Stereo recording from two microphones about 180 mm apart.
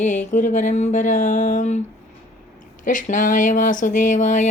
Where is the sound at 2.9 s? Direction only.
45° left (ahead or behind).